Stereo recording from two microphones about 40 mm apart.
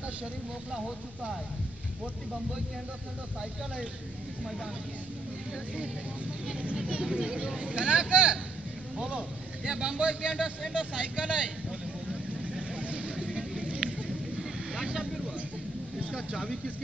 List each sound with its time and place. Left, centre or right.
0.7 s speech: centre
7.1 s speech: centre
7.5 s speech: right
9.7 s speech: right
12.7 s vehicle: right
14.7 s vehicle: centre
16.1 s speech: centre